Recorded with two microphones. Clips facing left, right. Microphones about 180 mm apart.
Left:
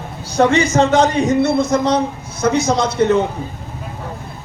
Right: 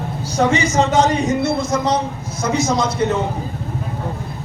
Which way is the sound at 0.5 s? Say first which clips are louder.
Left 1 dB; 60° left (ahead or behind).